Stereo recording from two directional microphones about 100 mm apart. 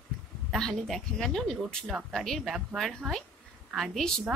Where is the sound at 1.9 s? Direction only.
5° right (ahead or behind).